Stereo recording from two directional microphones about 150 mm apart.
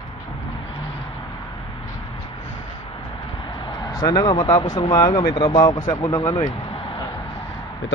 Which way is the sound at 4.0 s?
25° left (ahead or behind).